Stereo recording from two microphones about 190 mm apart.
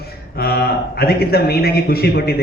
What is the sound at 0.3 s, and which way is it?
A man's voice, 55° left (ahead or behind).